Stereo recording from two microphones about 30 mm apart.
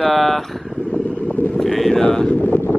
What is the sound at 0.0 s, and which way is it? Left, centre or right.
Vehicle, centre.